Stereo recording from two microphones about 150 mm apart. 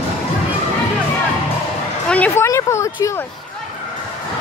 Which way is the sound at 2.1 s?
10° left (ahead or behind).